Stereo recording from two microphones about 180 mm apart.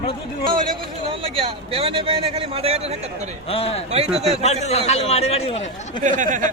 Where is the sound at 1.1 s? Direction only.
30° right (ahead or behind).